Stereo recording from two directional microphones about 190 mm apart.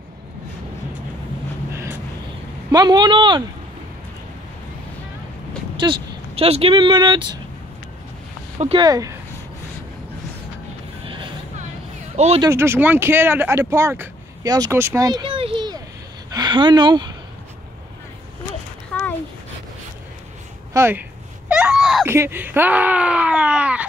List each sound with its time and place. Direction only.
2.7 s speech: 20° right (ahead or behind)
5.8 s speech: 30° right (ahead or behind)
8.5 s speech: 30° right (ahead or behind)
8.8 s speech: 20° right (ahead or behind)
11.1 s vehicle: 25° right (ahead or behind)
12.4 s speech: 15° right (ahead or behind)
18.9 s a sound: 5° left (ahead or behind)
20.7 s speech: 15° right (ahead or behind)
21.5 s a sound: 5° right (ahead or behind)
22.0 s speech: 15° right (ahead or behind)